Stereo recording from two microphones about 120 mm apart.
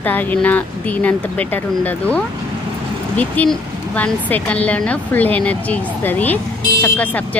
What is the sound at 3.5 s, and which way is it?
Speech, 10° left (ahead or behind).